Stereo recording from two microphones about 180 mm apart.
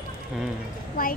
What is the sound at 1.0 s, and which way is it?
Speech, 55° left (ahead or behind).